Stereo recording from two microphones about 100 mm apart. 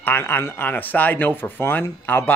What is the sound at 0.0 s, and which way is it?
Speech, 20° left (ahead or behind).